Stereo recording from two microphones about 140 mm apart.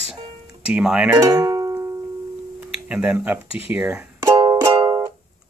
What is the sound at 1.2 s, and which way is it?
Music, 25° right (ahead or behind).